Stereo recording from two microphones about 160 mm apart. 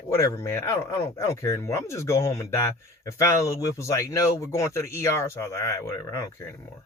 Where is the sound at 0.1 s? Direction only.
20° left (ahead or behind).